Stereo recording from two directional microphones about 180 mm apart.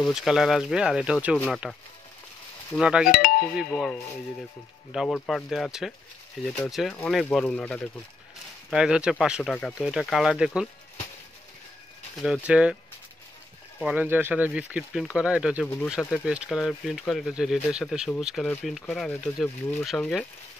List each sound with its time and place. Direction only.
0.0 s speech: centre (ahead or behind)
3.1 s speech: 55° left (ahead or behind)
3.5 s speech: centre (ahead or behind)
8.6 s speech: 5° right (ahead or behind)
12.2 s speech: 5° right (ahead or behind)
13.9 s speech: 10° right (ahead or behind)
15.6 s speech: 10° left (ahead or behind)
16.1 s speech: centre (ahead or behind)